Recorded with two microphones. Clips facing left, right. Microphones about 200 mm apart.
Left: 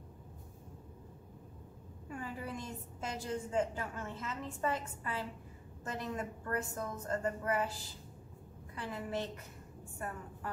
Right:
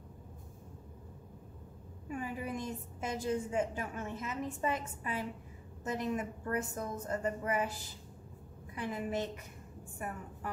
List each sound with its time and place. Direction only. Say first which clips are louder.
2.0 s a woman's voice: right 4 dB; 15° right (ahead or behind)
8.7 s a woman's voice: right 3 dB; 20° right (ahead or behind)